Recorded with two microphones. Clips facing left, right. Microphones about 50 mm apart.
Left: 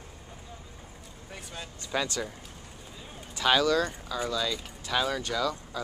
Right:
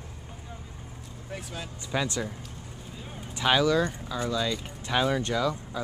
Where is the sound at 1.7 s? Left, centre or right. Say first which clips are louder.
Right 1 dB; centre.